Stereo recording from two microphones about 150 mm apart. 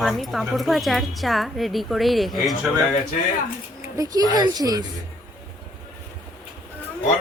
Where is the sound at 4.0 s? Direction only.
25° right (ahead or behind).